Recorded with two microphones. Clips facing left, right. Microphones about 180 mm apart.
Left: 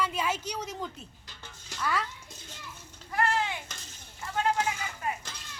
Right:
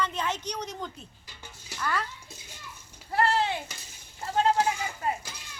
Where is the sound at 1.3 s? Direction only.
10° right (ahead or behind).